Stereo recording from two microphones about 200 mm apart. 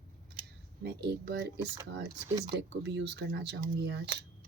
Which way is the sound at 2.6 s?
60° right (ahead or behind).